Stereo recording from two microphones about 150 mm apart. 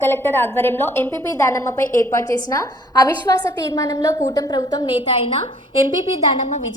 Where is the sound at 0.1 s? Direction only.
15° left (ahead or behind); by 5.4 s 35° left (ahead or behind).